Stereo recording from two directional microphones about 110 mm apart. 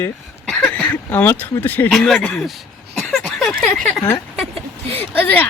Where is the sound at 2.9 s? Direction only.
5° left (ahead or behind).